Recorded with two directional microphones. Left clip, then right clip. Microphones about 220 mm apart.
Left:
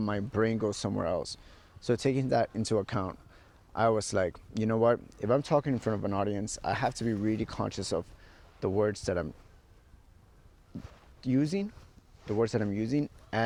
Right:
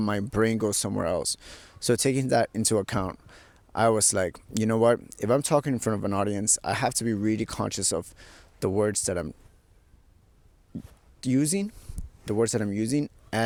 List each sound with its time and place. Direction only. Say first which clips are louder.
0.0 s speech: right 4 dB; 50° right (ahead or behind)
11.2 s speech: right 4 dB; 50° right (ahead or behind)